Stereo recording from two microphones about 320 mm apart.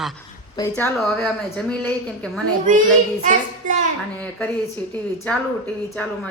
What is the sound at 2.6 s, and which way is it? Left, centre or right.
A child's voice, right.